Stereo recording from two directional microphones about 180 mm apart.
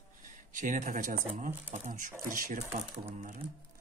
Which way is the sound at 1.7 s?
45° right (ahead or behind).